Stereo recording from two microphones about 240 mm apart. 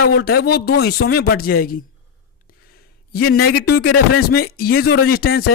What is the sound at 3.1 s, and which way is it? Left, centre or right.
Speech, left.